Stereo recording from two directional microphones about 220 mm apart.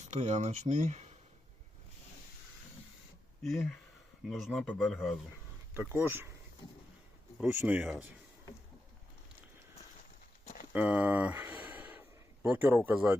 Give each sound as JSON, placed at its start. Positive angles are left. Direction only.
{"t": 0.1, "sound": "speech", "side_deg": -30}
{"t": 3.4, "sound": "speech", "side_deg": 0}
{"t": 7.4, "sound": "speech", "side_deg": -10}
{"t": 10.4, "sound": "walk", "side_deg": 40}
{"t": 10.7, "sound": "a sound", "side_deg": -5}